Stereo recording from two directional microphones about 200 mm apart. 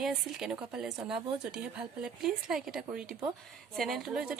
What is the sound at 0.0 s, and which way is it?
A woman's voice, 5° right (ahead or behind).